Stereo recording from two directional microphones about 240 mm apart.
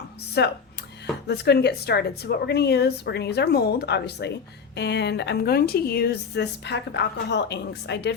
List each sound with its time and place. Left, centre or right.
0.4 s speech: left